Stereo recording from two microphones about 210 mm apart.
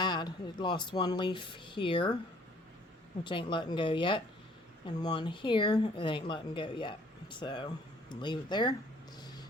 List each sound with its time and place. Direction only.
0.0 s speech: 20° left (ahead or behind)
3.2 s speech: 25° left (ahead or behind)